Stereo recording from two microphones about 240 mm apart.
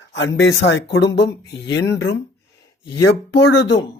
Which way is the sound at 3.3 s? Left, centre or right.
Left.